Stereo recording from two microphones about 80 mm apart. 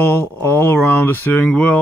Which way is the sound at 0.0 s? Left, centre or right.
Left.